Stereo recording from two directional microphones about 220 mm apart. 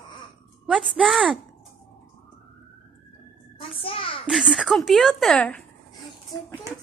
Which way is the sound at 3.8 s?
25° left (ahead or behind).